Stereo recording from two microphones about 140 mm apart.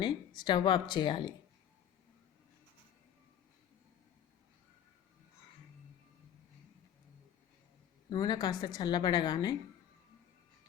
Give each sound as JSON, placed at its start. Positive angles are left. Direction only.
{"t": 0.0, "sound": "speech", "side_deg": 35}
{"t": 8.1, "sound": "a woman's voice", "side_deg": 30}